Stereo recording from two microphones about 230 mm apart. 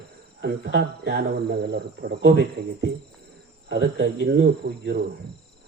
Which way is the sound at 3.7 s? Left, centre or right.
Right.